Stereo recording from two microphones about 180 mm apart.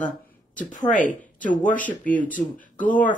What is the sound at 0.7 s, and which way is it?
Speech, 45° left (ahead or behind).